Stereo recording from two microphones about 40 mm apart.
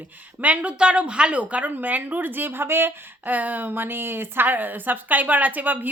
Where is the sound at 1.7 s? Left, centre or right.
Right.